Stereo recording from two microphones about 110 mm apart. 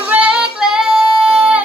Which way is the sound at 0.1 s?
5° right (ahead or behind).